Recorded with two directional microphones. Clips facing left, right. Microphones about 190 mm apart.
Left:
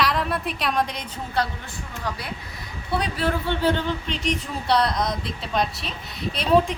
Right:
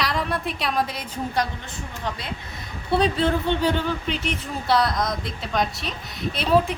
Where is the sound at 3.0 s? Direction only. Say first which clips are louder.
Right 5 dB; 25° right (ahead or behind).